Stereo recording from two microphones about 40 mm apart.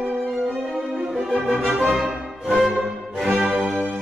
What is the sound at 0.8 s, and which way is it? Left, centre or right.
Music, centre.